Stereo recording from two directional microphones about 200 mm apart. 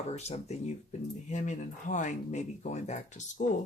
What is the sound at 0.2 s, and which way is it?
Speech, 35° left (ahead or behind).